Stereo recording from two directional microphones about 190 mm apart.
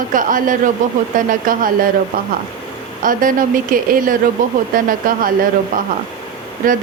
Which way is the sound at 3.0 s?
45° right (ahead or behind).